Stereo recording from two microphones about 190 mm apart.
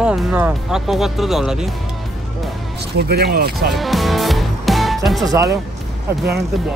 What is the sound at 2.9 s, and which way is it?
Speech, 55° right (ahead or behind).